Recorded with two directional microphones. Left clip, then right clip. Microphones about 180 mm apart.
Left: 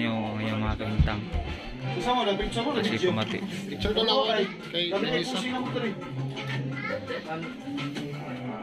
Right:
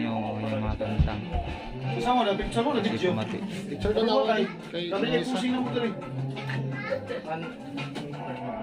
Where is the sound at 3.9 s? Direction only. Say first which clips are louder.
Even; 55° right (ahead or behind).